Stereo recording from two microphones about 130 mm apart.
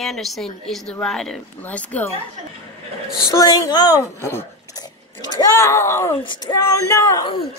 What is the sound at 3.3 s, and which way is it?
A woman's voice, 25° left (ahead or behind).